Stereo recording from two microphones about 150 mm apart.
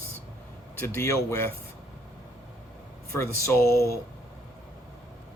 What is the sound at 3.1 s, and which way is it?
Speech, 20° left (ahead or behind).